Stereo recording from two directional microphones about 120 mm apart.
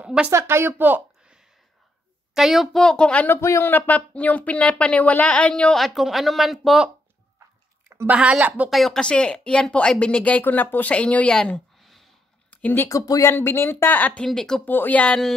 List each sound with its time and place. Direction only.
0.0 s speech: 10° right (ahead or behind)
0.3 s a woman's voice: 20° right (ahead or behind)
2.3 s speech: centre (ahead or behind)
8.1 s a woman's voice: 10° right (ahead or behind)
8.6 s speech: centre (ahead or behind)
12.4 s a sound: 15° left (ahead or behind)
12.9 s speech: 30° left (ahead or behind); by 15.3 s 5° left (ahead or behind)